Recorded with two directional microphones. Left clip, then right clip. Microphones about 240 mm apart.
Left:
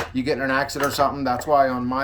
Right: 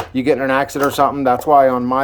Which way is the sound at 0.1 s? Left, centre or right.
Centre.